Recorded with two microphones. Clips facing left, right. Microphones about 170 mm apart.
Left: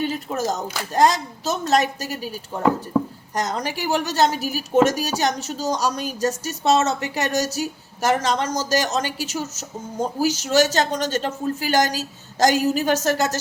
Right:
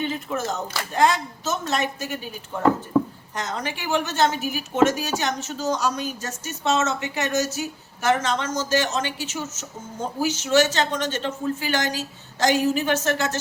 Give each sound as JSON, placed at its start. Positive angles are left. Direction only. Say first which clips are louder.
{"t": 0.0, "sound": "speech", "louder": "left 3 dB", "side_deg": 40}
{"t": 3.3, "sound": "speech", "louder": "left 4 dB", "side_deg": 40}